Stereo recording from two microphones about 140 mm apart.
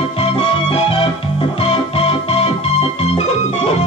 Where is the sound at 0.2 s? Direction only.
40° left (ahead or behind).